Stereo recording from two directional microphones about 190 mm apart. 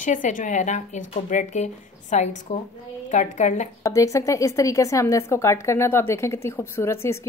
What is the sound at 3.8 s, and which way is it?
A woman's voice, 15° left (ahead or behind).